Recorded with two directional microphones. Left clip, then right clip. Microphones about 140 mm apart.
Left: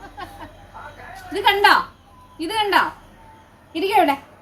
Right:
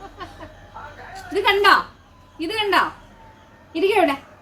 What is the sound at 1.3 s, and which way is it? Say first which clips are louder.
A woman's voice: even; 15° left (ahead or behind).